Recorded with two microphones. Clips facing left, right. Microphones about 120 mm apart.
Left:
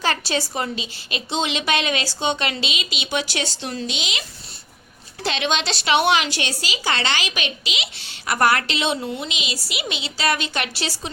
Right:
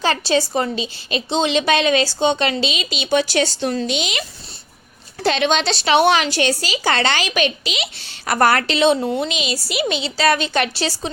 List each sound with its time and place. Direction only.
0.0 s a woman's voice: 25° right (ahead or behind); by 4.2 s 50° right (ahead or behind)
5.2 s a woman's voice: 40° right (ahead or behind)